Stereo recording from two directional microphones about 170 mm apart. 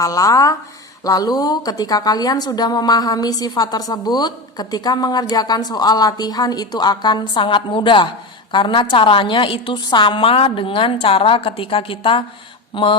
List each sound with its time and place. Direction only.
0.0 s a woman's voice: 20° left (ahead or behind)